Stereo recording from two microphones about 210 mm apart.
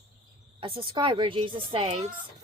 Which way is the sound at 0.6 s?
25° right (ahead or behind).